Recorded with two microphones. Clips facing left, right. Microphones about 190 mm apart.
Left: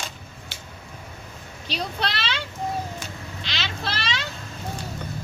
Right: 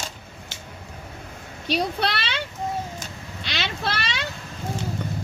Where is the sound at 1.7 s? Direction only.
60° right (ahead or behind).